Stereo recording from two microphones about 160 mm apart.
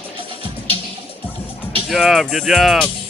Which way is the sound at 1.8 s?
Centre (ahead or behind).